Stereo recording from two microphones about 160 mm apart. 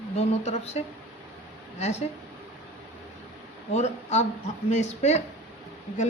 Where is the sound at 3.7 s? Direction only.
45° left (ahead or behind).